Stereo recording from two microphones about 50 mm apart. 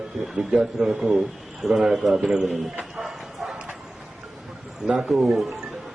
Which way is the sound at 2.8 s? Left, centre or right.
Centre.